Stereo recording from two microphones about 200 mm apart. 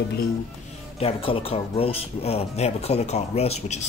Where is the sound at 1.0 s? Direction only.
30° left (ahead or behind).